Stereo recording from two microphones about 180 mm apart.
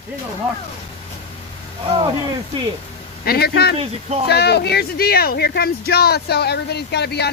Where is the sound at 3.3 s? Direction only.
65° left (ahead or behind).